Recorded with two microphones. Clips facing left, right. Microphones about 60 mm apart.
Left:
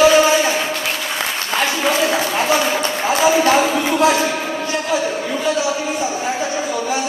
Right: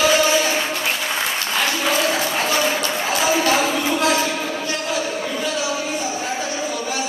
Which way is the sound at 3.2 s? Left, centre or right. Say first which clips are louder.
Left 5 dB; centre.